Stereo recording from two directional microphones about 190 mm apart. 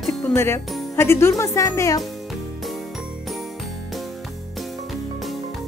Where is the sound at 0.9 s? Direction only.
15° left (ahead or behind).